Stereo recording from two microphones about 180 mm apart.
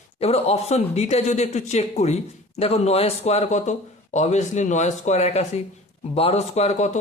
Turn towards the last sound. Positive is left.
turn(degrees=40)  # may be behind; listen again after turning